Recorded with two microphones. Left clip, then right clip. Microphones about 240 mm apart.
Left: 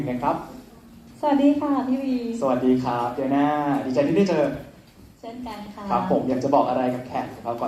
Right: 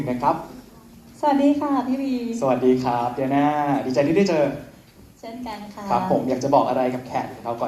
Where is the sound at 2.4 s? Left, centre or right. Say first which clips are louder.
Right 3 dB; right.